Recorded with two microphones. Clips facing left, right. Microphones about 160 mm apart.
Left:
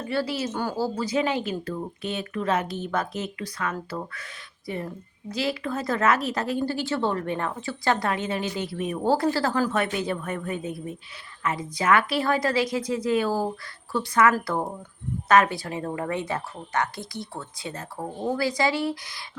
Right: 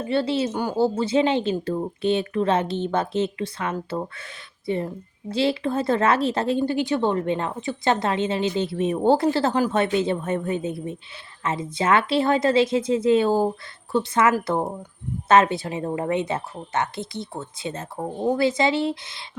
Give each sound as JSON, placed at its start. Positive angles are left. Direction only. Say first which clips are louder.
{"t": 0.0, "sound": "speech", "louder": "right 5 dB", "side_deg": -25}